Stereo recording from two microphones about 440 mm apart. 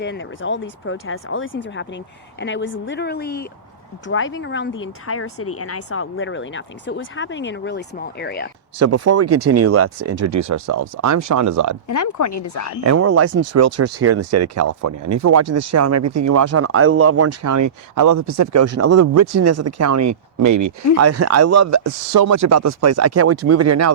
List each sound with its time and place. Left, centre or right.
0.0 s speech: left
8.8 s speech: right
11.9 s speech: left
12.8 s speech: right